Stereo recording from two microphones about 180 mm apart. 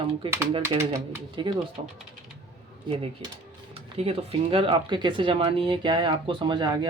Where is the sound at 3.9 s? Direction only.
35° right (ahead or behind).